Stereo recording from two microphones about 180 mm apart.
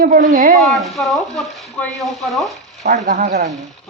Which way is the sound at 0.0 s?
45° right (ahead or behind).